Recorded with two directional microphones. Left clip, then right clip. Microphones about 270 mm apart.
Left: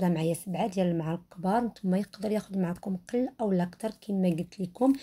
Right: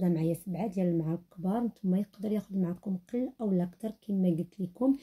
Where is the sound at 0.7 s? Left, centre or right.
Left.